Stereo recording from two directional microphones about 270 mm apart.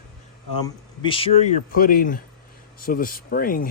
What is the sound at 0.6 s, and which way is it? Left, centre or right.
Speech, centre.